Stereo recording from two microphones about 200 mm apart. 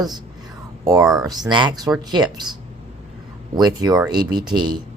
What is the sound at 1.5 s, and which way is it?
Speech, 20° right (ahead or behind).